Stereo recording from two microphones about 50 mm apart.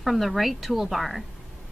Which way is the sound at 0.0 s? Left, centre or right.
Centre.